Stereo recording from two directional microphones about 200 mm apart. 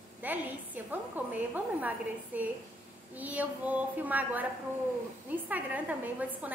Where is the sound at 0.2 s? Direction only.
10° right (ahead or behind).